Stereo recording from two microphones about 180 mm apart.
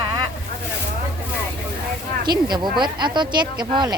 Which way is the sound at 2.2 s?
25° right (ahead or behind).